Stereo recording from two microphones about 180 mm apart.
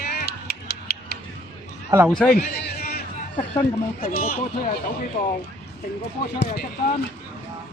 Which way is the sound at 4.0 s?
55° left (ahead or behind).